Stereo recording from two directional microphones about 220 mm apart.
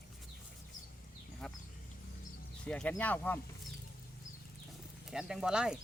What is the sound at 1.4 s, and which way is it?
Speech, centre (ahead or behind).